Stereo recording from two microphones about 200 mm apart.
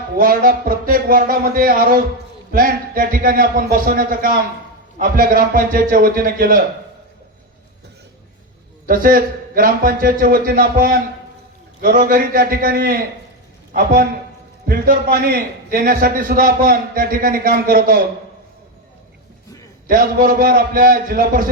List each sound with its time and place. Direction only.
0.2 s a man's voice: 45° right (ahead or behind)
8.9 s a man's voice: 45° right (ahead or behind)
19.9 s a man's voice: 45° right (ahead or behind)